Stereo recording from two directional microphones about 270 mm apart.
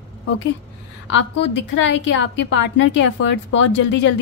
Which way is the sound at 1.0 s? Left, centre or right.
Left.